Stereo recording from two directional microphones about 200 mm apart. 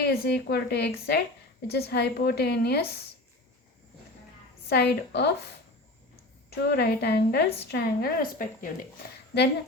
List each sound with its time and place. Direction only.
0.0 s a woman's voice: 55° left (ahead or behind)
4.7 s a woman's voice: 55° left (ahead or behind)
6.6 s a woman's voice: 55° left (ahead or behind)